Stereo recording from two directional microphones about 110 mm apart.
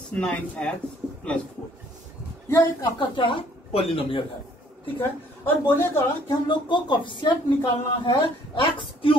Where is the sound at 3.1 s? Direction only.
50° left (ahead or behind).